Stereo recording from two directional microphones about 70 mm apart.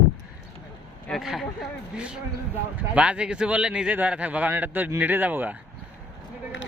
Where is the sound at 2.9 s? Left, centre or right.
Centre.